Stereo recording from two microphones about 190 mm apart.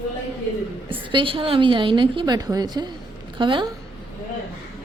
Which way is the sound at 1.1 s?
25° right (ahead or behind).